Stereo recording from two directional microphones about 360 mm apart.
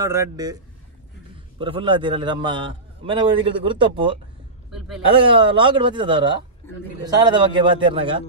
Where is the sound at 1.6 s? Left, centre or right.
Centre.